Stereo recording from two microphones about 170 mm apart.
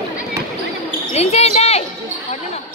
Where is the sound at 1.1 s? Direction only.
40° left (ahead or behind).